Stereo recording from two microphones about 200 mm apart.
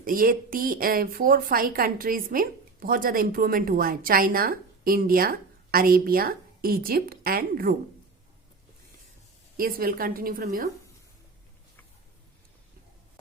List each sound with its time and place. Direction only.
0.0 s speech: 45° right (ahead or behind)
9.6 s speech: 45° right (ahead or behind)